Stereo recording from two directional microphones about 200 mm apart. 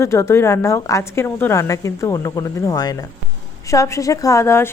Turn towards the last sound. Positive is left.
turn(degrees=15)  # may be behind; listen again after turning